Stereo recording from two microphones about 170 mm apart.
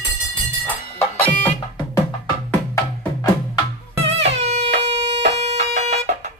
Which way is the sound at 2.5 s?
10° left (ahead or behind).